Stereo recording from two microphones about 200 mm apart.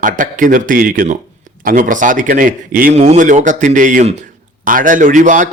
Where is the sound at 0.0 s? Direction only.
40° right (ahead or behind).